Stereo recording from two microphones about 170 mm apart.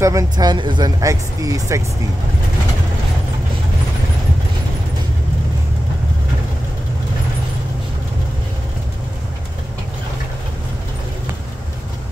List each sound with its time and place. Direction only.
0.0 s speech: 20° right (ahead or behind)